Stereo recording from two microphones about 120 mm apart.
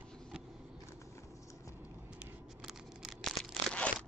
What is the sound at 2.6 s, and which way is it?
Tearing, 5° right (ahead or behind).